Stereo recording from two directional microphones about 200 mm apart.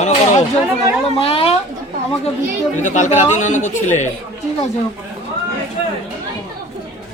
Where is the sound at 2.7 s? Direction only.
35° left (ahead or behind).